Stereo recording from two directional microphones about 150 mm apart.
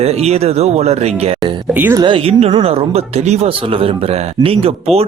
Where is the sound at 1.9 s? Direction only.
35° right (ahead or behind).